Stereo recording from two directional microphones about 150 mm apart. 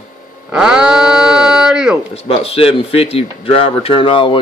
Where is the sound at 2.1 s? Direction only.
40° left (ahead or behind).